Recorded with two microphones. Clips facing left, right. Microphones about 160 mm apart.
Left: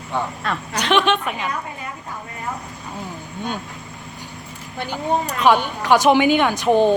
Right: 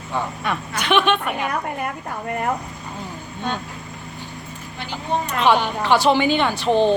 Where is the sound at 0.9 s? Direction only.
5° right (ahead or behind).